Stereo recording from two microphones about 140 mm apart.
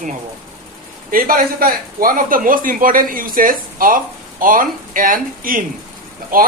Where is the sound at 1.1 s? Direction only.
90° right.